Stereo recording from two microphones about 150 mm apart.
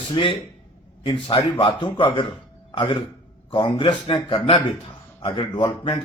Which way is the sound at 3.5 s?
35° left (ahead or behind).